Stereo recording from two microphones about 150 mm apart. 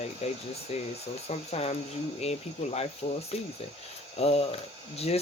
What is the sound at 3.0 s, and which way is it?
Speech, 45° left (ahead or behind).